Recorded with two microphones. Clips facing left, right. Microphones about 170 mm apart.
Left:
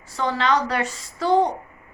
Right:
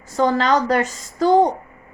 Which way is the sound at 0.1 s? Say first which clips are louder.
Right 5 dB; 45° right (ahead or behind).